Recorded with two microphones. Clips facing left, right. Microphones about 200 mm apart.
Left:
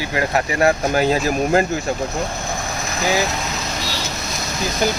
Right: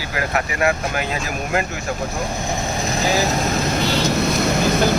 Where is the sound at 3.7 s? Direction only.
55° right (ahead or behind).